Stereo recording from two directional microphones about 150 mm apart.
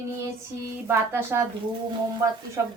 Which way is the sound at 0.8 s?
15° right (ahead or behind).